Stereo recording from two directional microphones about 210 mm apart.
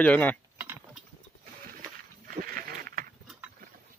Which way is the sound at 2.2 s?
45° right (ahead or behind).